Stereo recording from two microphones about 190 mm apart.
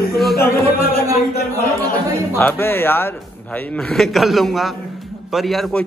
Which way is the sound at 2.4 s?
10° left (ahead or behind).